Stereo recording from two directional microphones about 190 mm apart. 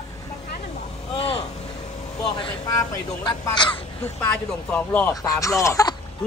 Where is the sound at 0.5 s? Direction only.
35° left (ahead or behind).